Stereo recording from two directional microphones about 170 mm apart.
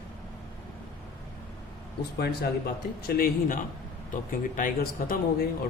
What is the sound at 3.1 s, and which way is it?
A man's voice, 55° left (ahead or behind).